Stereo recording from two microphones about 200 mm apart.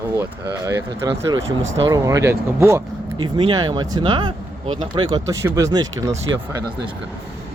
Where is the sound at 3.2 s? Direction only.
25° right (ahead or behind).